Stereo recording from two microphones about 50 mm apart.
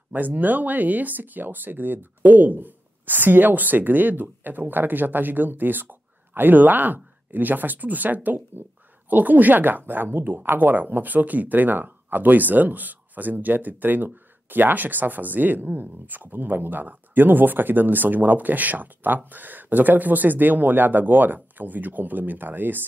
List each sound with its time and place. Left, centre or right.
0.1 s speech: right